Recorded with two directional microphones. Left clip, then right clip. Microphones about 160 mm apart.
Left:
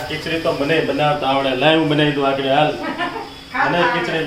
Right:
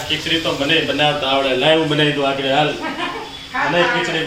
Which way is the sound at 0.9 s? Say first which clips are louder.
Right 1 dB; 60° left (ahead or behind).